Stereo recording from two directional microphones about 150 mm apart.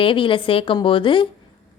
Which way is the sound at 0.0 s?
35° left (ahead or behind).